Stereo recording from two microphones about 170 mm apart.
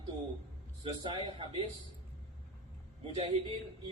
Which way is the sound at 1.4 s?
30° right (ahead or behind).